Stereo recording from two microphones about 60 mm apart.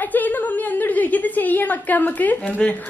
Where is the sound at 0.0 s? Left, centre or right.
Left.